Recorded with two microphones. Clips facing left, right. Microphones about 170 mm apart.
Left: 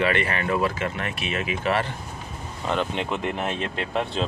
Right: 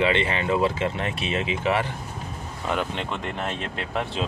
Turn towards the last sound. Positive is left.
turn(degrees=5)  # may be behind; listen again after turning